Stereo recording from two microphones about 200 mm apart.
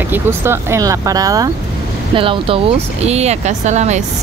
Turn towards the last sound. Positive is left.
turn(degrees=-35)  # may be behind; listen again after turning